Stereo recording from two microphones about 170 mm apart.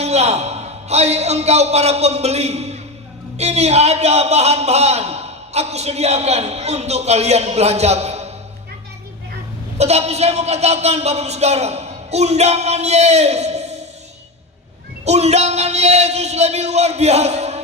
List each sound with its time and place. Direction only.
0.0 s a man's voice: 40° right (ahead or behind)
9.7 s a man's voice: 40° right (ahead or behind)
15.0 s a man's voice: 40° right (ahead or behind)